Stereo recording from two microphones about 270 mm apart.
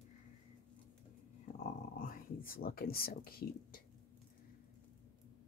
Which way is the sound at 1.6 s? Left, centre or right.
Left.